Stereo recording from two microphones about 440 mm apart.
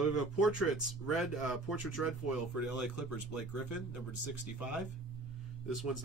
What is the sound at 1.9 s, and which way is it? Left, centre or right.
Speech, left.